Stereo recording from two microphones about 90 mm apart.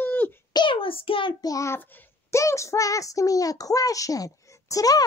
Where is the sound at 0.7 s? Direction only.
90° left.